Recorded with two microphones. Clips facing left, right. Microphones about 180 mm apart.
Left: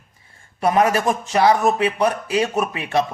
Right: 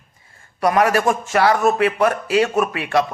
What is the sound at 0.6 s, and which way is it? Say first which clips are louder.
A man's voice: right 1 dB; 25° left (ahead or behind).